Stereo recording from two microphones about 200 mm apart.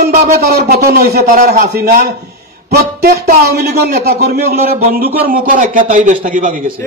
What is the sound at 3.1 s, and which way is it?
A man's voice, 50° right (ahead or behind).